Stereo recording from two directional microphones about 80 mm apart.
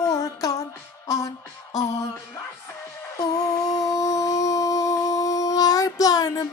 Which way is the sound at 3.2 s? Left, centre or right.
Left.